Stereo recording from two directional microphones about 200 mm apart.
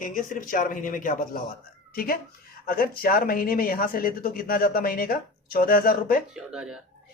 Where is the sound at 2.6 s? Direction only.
45° left (ahead or behind).